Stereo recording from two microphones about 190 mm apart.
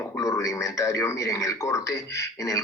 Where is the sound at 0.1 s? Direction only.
15° left (ahead or behind).